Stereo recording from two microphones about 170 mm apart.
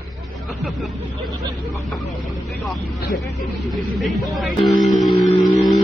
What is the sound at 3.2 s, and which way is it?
Speech, centre (ahead or behind).